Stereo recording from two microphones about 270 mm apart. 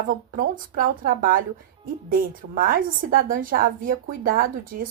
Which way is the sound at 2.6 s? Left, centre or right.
Right.